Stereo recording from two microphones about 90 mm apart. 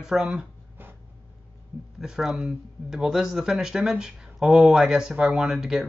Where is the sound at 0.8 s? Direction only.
25° right (ahead or behind).